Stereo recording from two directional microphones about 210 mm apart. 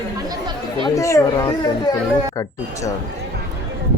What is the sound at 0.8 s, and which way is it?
Speech, 15° left (ahead or behind).